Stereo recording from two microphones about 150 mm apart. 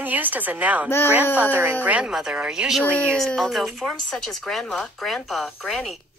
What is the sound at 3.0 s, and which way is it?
Speech, 5° left (ahead or behind).